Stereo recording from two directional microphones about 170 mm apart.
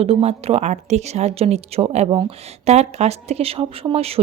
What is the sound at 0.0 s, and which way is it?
Speech, 35° right (ahead or behind).